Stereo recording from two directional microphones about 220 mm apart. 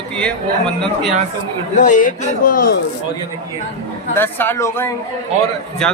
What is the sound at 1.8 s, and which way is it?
A man's voice, 35° left (ahead or behind).